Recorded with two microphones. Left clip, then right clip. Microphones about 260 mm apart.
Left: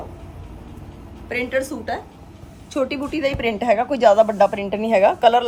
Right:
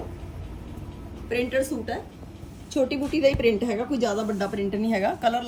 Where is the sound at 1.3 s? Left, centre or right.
Centre.